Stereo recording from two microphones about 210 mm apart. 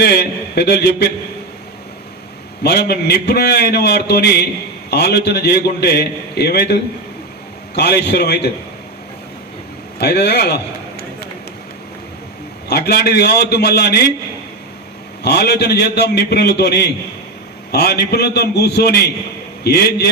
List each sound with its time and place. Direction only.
0.0 s a man's voice: 50° left (ahead or behind)
2.6 s a man's voice: 50° left (ahead or behind)
7.8 s a man's voice: 50° left (ahead or behind)
10.0 s a man's voice: 50° left (ahead or behind)
12.6 s a man's voice: 50° left (ahead or behind)
15.2 s a man's voice: 50° left (ahead or behind)